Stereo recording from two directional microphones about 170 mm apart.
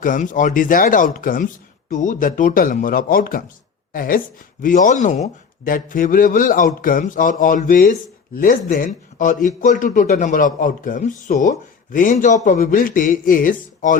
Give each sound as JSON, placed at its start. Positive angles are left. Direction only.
{"t": 0.0, "sound": "speech", "side_deg": 50}